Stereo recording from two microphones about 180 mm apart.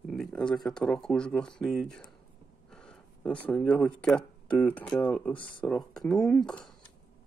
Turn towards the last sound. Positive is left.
turn(degrees=5)  # may be behind; listen again after turning